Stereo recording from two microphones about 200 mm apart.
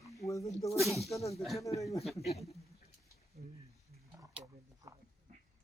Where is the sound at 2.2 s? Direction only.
30° left (ahead or behind).